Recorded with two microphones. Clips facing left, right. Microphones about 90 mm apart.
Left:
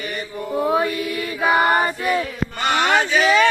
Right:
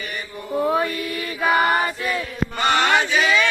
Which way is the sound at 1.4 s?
10° left (ahead or behind).